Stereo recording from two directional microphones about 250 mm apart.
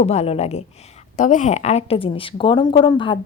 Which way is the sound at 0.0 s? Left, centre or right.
Left.